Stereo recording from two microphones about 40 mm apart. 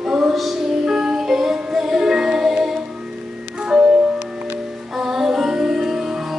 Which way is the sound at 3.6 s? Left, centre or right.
Centre.